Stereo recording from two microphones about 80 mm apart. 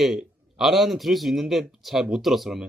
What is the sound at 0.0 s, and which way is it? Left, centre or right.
Speech, centre.